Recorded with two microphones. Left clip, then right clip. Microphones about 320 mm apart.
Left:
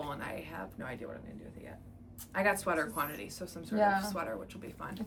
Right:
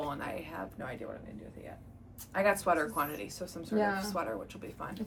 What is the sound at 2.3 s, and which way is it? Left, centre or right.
Speech, centre.